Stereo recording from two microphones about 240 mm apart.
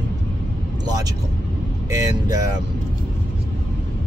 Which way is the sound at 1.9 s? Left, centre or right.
Centre.